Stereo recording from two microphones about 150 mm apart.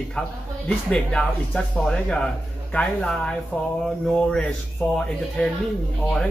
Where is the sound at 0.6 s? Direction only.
5° left (ahead or behind).